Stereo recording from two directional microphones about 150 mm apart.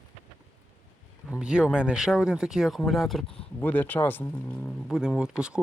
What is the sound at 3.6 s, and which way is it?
Speech, 15° left (ahead or behind).